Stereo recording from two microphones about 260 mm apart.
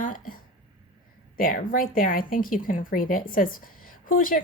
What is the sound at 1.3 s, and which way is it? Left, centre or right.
Speech, left.